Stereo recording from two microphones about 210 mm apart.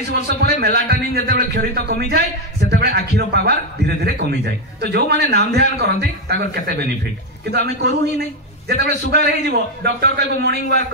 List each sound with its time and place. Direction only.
0.1 s a man's voice: 50° right (ahead or behind)
9.1 s a man's voice: 50° right (ahead or behind)